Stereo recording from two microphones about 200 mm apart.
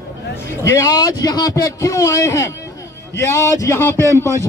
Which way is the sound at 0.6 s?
15° left (ahead or behind).